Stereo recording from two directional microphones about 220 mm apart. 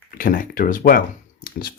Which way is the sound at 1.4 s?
45° left (ahead or behind).